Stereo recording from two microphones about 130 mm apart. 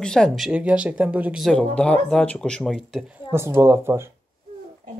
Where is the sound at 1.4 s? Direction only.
5° left (ahead or behind).